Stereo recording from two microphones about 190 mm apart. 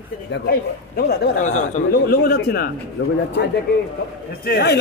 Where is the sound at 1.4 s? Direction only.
40° left (ahead or behind).